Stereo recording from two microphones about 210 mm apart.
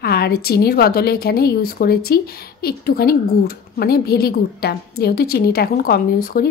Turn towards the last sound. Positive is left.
turn(degrees=45)  # may be behind; listen again after turning